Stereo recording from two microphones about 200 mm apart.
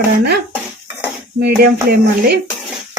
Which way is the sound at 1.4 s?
55° right (ahead or behind).